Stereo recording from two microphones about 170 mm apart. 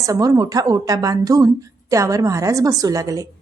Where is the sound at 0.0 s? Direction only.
20° right (ahead or behind).